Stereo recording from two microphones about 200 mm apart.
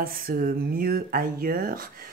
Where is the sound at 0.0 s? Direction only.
45° right (ahead or behind).